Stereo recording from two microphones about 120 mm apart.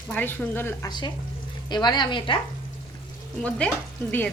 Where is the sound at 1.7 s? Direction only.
40° left (ahead or behind).